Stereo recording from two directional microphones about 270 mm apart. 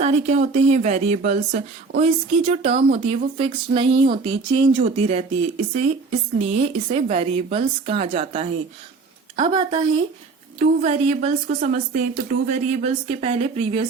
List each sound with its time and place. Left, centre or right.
0.0 s a woman's voice: right